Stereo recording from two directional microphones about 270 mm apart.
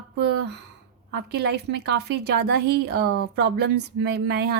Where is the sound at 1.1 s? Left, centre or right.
Right.